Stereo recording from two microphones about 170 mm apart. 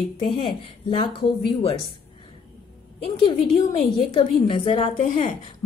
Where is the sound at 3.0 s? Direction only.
30° left (ahead or behind).